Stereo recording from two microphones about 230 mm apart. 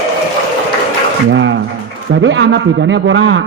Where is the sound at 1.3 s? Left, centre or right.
Right.